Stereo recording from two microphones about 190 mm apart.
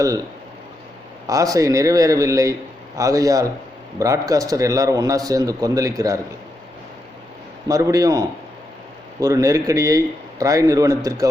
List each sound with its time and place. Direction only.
1.3 s a man's voice: 15° right (ahead or behind)
7.7 s a man's voice: 15° right (ahead or behind)
9.2 s a man's voice: 15° right (ahead or behind)